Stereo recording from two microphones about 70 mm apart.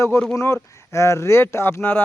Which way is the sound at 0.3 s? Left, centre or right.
Left.